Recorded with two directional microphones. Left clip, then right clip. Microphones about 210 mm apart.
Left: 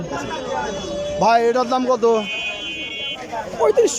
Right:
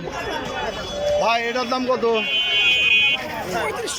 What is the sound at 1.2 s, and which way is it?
Speech, 20° left (ahead or behind).